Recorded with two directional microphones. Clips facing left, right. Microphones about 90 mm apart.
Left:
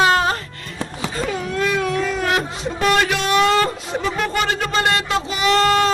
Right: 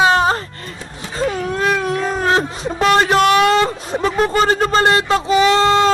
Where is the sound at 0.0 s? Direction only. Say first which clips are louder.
Right 3 dB; 25° right (ahead or behind).